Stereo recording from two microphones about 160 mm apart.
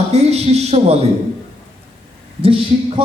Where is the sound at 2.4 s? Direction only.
35° right (ahead or behind).